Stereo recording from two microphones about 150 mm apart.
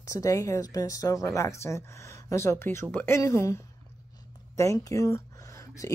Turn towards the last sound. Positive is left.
turn(degrees=20)  # may be behind; listen again after turning